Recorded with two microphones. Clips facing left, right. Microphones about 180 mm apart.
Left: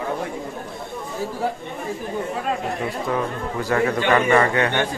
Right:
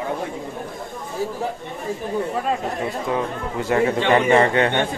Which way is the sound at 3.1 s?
25° right (ahead or behind).